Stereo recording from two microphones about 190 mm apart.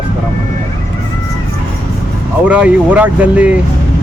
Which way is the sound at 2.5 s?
5° right (ahead or behind).